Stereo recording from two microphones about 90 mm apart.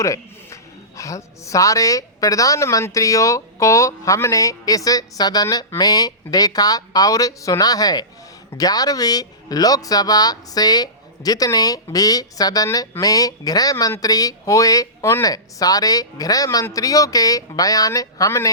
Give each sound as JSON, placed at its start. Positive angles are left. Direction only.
{"t": 0.0, "sound": "a man's voice", "side_deg": 35}